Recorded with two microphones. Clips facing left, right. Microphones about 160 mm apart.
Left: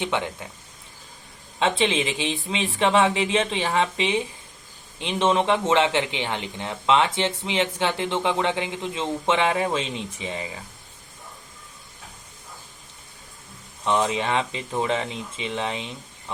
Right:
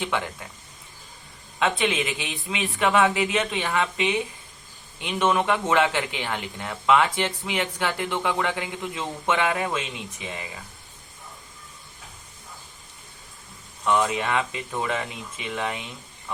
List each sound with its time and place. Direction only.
0.0 s speech: 20° left (ahead or behind)
1.5 s speech: 30° left (ahead or behind)
13.8 s speech: 25° left (ahead or behind)